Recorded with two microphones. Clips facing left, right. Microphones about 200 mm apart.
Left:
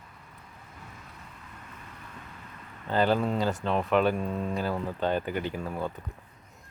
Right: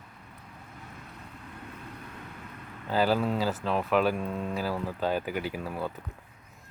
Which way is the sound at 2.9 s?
5° right (ahead or behind).